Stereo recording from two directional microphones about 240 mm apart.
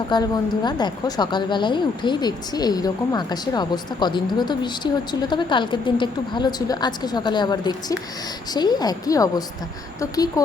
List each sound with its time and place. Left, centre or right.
0.1 s a woman's voice: centre